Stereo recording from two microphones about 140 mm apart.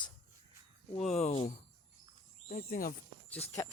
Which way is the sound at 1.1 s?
50° left (ahead or behind).